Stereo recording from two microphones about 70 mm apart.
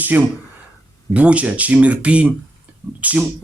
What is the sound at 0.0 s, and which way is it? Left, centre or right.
Speech, right.